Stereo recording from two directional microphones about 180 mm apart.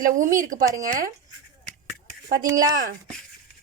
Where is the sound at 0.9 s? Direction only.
45° right (ahead or behind).